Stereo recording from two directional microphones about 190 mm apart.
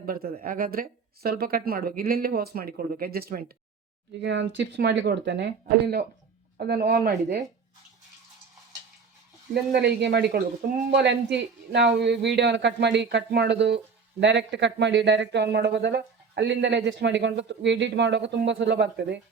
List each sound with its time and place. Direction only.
0.0 s speech: 50° right (ahead or behind)
4.2 s speech: 70° right (ahead or behind)
9.5 s speech: 60° right (ahead or behind)